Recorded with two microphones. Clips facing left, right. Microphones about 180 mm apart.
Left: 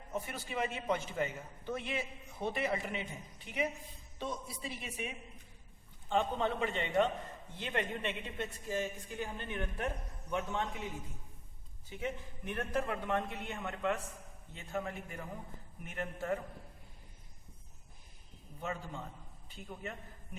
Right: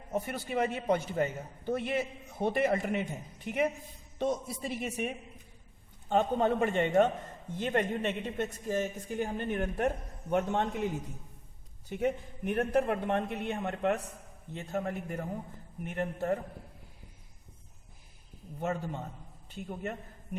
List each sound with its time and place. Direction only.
0.1 s a man's voice: 50° right (ahead or behind)
19.6 s a man's voice: 45° right (ahead or behind)